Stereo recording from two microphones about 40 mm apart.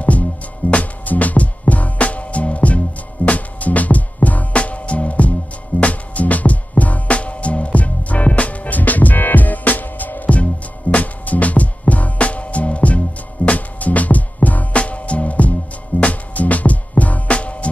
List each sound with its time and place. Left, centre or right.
0.7 s music: left